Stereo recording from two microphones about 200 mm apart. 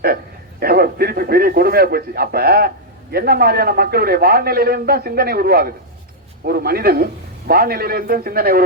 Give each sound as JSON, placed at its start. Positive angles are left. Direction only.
{"t": 0.6, "sound": "a man's voice", "side_deg": -50}